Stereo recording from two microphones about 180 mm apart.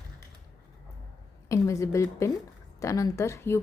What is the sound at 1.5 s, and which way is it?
Speech, 15° left (ahead or behind).